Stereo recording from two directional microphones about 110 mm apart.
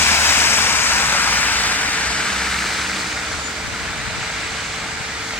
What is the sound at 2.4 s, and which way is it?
Vehicle, centre (ahead or behind).